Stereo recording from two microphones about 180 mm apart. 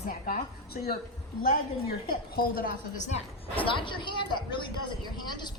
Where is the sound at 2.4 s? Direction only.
55° left (ahead or behind).